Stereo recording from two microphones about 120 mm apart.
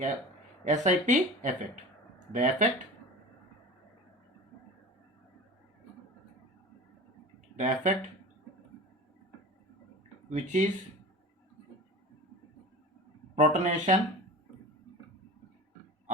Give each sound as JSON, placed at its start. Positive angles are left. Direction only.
{"t": 0.6, "sound": "speech", "side_deg": -85}
{"t": 7.5, "sound": "speech", "side_deg": -90}
{"t": 10.2, "sound": "speech", "side_deg": -85}
{"t": 13.3, "sound": "speech", "side_deg": -90}